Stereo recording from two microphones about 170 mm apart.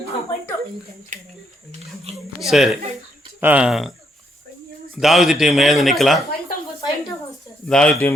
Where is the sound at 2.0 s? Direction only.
35° right (ahead or behind).